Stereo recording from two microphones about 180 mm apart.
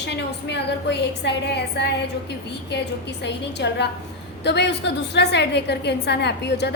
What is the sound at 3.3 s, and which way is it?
A woman's voice, 75° left (ahead or behind).